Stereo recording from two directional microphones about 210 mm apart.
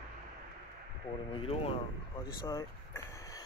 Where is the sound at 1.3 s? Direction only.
25° left (ahead or behind).